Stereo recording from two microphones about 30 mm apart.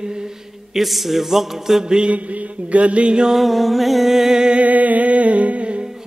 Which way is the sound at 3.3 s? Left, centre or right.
Centre.